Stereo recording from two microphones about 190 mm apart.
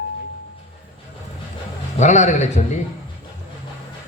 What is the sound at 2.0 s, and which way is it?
Speech, 40° left (ahead or behind).